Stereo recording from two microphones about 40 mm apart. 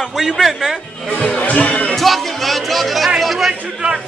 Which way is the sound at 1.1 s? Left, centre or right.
Left.